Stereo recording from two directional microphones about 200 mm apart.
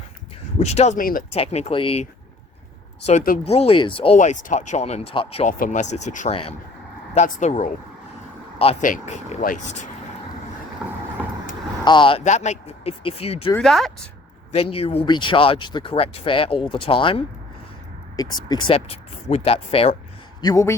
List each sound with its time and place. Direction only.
0.6 s speech: 35° left (ahead or behind)
1.4 s speech: 30° left (ahead or behind)
3.1 s speech: 40° left (ahead or behind)
8.8 s speech: 40° left (ahead or behind)
10.8 s vehicle: 5° right (ahead or behind)
11.9 s speech: 25° left (ahead or behind)
12.2 s speech: 35° left (ahead or behind)
13.6 s speech: centre (ahead or behind)
14.5 s speech: 30° left (ahead or behind)
20.4 s speech: 15° left (ahead or behind)